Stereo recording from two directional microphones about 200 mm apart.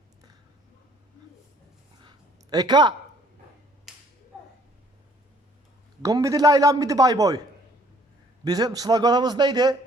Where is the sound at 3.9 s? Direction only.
Centre (ahead or behind).